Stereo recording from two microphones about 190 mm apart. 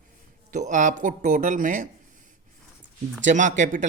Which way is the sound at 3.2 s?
40° right (ahead or behind).